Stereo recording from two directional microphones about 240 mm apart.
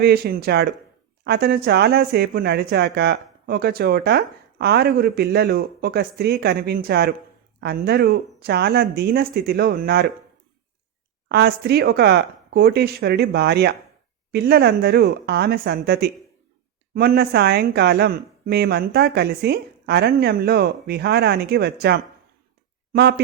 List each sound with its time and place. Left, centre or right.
0.0 s speech: right
11.3 s speech: right